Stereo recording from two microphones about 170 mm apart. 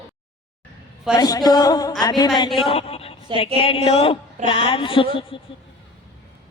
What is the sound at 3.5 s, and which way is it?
A woman's voice, 35° left (ahead or behind).